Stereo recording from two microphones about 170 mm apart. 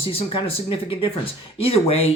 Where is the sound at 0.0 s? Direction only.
35° left (ahead or behind).